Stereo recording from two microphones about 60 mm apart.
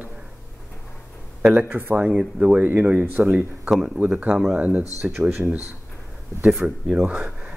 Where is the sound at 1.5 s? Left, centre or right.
Right.